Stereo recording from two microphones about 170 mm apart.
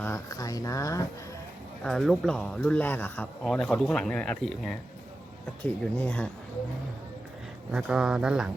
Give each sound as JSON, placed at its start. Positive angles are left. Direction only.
{"t": 0.0, "sound": "speech", "side_deg": 20}
{"t": 1.8, "sound": "a man's voice", "side_deg": 5}
{"t": 7.7, "sound": "a man's voice", "side_deg": -5}